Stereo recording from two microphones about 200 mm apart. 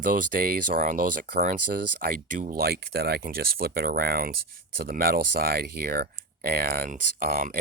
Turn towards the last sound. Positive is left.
turn(degrees=-50)  # may be behind; listen again after turning